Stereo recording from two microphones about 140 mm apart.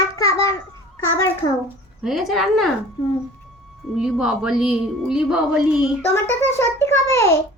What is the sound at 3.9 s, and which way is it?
A woman's voice, 5° right (ahead or behind).